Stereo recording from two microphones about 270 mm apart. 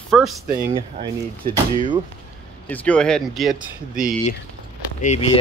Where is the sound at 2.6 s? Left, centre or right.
Centre.